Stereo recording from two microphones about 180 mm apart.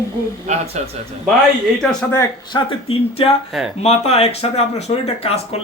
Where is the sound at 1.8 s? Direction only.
15° left (ahead or behind).